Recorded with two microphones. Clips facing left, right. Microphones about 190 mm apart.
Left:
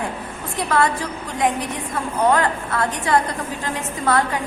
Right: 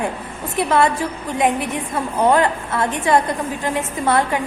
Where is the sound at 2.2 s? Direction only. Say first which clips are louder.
Right 2 dB; 20° right (ahead or behind).